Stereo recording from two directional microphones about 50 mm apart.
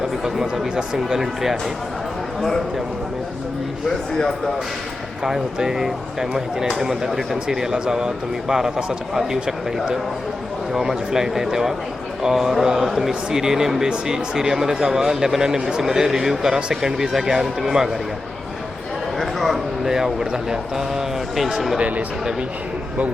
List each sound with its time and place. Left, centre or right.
0.3 s speech: centre
5.2 s speech: centre
19.2 s a sound: centre
19.9 s speech: centre
21.8 s speech: right